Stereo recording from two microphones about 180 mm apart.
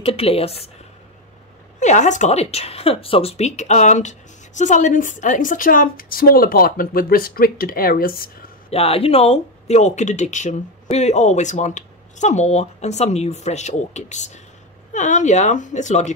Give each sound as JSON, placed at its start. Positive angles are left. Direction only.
{"t": 0.0, "sound": "speech", "side_deg": 30}
{"t": 1.8, "sound": "speech", "side_deg": 40}
{"t": 8.6, "sound": "speech", "side_deg": 35}